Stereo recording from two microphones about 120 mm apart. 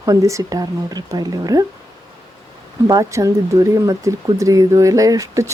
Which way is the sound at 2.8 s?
30° right (ahead or behind).